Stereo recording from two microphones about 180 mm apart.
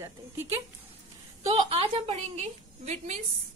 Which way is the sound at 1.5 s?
30° right (ahead or behind).